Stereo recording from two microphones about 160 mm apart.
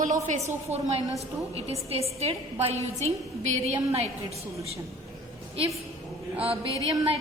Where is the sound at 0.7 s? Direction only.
45° right (ahead or behind).